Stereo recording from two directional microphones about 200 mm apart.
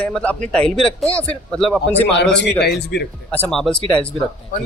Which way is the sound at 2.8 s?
55° left (ahead or behind).